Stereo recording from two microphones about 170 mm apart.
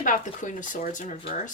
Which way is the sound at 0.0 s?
50° left (ahead or behind).